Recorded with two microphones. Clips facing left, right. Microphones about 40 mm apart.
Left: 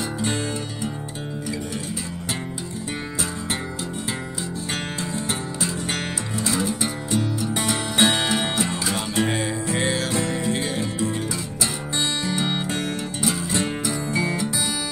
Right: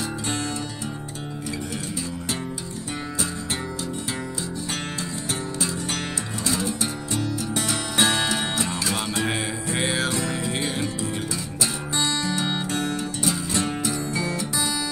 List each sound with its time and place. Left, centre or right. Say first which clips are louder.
6.4 s music: left 2 dB; centre
9.8 s music: even; centre
12.6 s music: even; left